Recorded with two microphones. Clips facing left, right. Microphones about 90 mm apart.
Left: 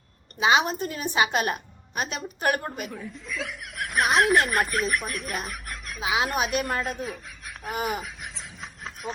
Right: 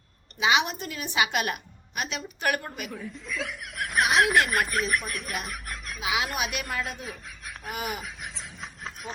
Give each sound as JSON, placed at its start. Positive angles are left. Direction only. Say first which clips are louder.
{"t": 0.3, "sound": "a woman's voice", "louder": "left 3 dB", "side_deg": 35}
{"t": 2.9, "sound": "speech", "louder": "even", "side_deg": 0}
{"t": 6.0, "sound": "a woman's voice", "louder": "left 4 dB", "side_deg": 35}
{"t": 6.8, "sound": "speech", "louder": "left 5 dB", "side_deg": 0}
{"t": 7.9, "sound": "chuckle", "louder": "left 4 dB", "side_deg": 0}